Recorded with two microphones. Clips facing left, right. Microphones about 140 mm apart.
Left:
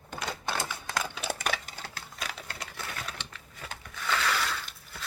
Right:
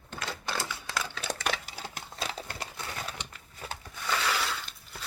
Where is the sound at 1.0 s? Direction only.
10° left (ahead or behind).